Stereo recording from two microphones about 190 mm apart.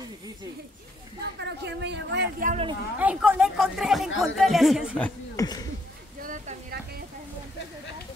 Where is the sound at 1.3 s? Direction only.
65° right (ahead or behind).